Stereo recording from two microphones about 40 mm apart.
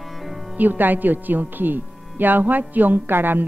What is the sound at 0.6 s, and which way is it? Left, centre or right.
Speech, right.